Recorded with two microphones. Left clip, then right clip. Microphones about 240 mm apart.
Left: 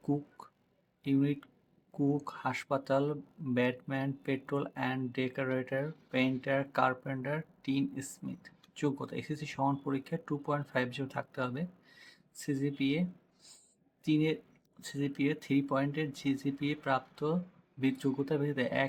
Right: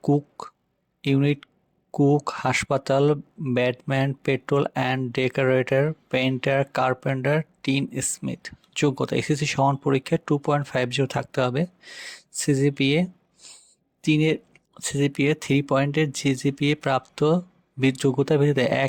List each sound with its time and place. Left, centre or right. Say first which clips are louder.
0.0 s speech: right 12 dB; right